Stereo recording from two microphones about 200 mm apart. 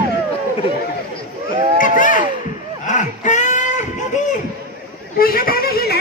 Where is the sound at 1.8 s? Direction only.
40° left (ahead or behind).